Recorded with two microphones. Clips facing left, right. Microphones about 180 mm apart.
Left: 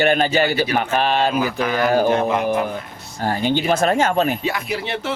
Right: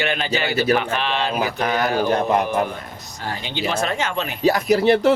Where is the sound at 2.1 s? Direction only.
40° right (ahead or behind).